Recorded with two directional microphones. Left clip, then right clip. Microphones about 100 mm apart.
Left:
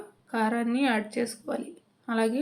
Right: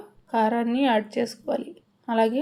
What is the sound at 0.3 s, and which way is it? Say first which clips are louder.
A woman's voice: right 5 dB; 25° right (ahead or behind).